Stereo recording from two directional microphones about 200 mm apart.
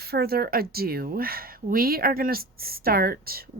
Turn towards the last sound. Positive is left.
turn(degrees=-50)  # may be behind; listen again after turning